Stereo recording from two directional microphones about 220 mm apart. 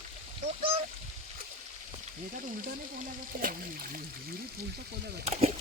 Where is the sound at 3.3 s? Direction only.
40° right (ahead or behind).